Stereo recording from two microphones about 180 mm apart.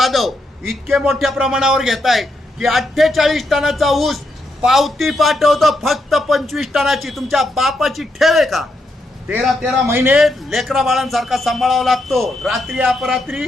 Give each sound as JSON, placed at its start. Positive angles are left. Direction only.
{"t": 0.0, "sound": "a man's voice", "side_deg": 0}
{"t": 10.2, "sound": "a man's voice", "side_deg": 0}